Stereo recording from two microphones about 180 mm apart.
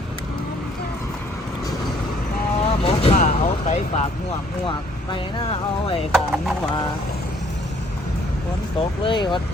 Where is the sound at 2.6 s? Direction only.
35° left (ahead or behind).